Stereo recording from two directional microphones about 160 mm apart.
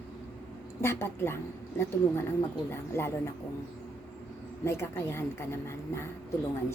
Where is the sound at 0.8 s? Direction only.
15° left (ahead or behind).